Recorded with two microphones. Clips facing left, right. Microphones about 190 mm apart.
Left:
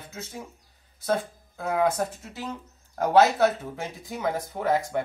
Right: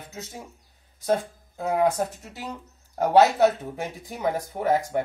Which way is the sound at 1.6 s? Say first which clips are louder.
Right 2 dB; 15° right (ahead or behind).